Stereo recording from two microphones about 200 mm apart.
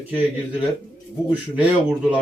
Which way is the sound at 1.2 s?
5° right (ahead or behind).